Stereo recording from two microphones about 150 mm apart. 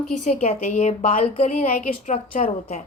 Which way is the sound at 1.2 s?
45° left (ahead or behind).